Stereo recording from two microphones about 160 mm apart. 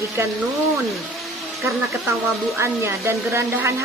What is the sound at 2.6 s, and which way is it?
A woman's voice, 15° right (ahead or behind).